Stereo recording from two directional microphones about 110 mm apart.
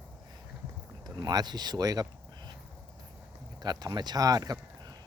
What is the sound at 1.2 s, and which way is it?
Speech, 40° right (ahead or behind).